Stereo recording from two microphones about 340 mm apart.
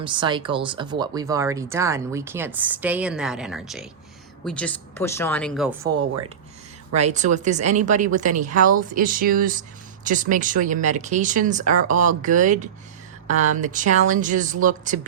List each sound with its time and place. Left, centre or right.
0.0 s speech: centre
6.9 s speech: centre